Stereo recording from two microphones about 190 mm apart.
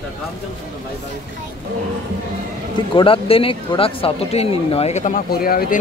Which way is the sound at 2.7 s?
25° left (ahead or behind).